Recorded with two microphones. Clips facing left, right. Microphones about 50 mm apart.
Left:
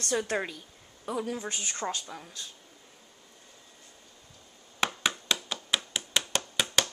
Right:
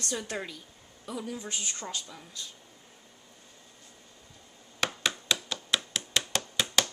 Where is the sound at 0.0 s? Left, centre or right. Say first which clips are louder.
Left 5 dB; left.